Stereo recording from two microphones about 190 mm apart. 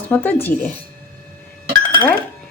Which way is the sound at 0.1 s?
10° left (ahead or behind).